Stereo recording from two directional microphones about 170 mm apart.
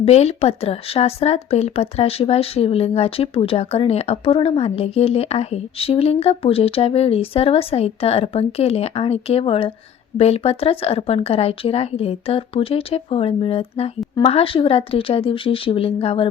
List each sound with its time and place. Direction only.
0.0 s speech: 40° left (ahead or behind)